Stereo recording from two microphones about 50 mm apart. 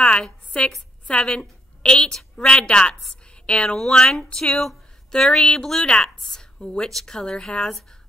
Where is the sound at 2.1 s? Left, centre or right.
Centre.